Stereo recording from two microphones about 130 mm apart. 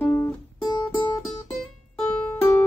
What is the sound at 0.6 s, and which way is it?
Music, 35° left (ahead or behind).